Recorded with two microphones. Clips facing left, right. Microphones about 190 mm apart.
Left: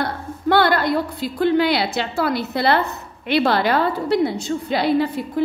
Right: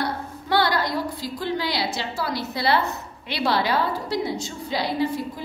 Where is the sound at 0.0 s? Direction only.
55° left (ahead or behind).